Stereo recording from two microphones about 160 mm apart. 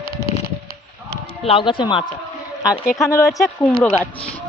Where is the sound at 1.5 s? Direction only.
35° left (ahead or behind).